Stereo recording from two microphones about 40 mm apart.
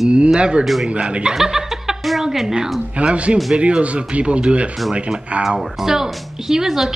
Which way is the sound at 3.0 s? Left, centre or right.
Right.